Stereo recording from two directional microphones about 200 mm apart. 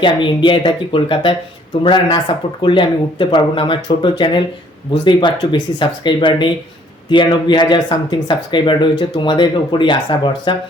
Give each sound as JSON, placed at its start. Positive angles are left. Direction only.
{"t": 0.0, "sound": "speech", "side_deg": 25}